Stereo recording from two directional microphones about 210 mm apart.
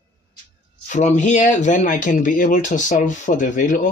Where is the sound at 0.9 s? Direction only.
35° left (ahead or behind).